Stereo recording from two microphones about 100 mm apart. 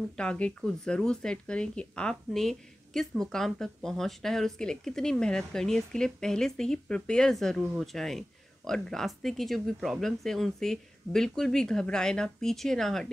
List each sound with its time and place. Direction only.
0.2 s speech: 10° left (ahead or behind)